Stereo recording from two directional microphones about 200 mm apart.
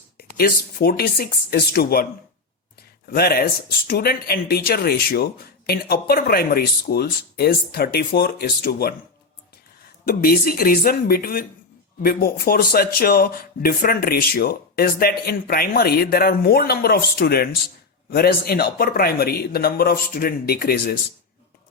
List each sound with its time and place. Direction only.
0.2 s speech: 50° left (ahead or behind)
3.1 s speech: 50° left (ahead or behind)
10.1 s speech: 45° left (ahead or behind)